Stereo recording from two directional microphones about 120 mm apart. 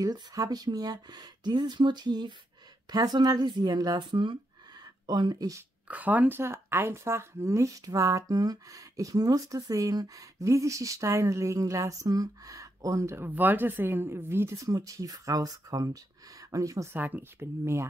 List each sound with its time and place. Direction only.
0.0 s speech: 30° right (ahead or behind)
5.9 s speech: 15° right (ahead or behind)